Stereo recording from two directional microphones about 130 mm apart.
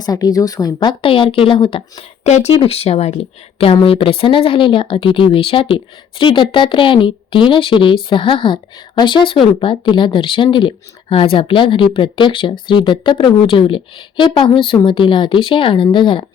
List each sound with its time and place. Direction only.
0.0 s speech: 30° left (ahead or behind)
2.2 s speech: 60° left (ahead or behind)
2.6 s speech: 50° left (ahead or behind)